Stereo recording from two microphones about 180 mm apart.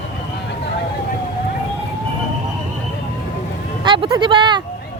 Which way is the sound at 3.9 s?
30° right (ahead or behind).